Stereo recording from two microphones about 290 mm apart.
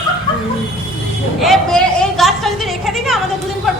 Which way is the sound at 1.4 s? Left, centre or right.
Centre.